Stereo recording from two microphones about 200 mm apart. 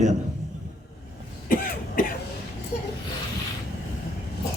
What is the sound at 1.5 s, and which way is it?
Cough, 45° left (ahead or behind).